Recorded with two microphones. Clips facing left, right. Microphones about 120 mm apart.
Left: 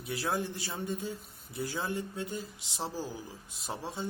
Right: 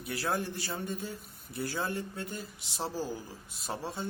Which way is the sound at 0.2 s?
20° left (ahead or behind).